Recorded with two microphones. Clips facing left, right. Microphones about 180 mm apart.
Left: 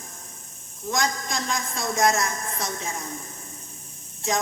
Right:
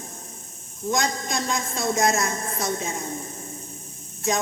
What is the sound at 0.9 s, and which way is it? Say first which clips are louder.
A woman's voice: right 1 dB; 25° right (ahead or behind).